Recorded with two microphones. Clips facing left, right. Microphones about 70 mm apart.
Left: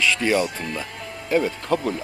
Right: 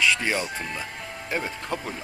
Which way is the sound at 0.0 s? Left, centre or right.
Right.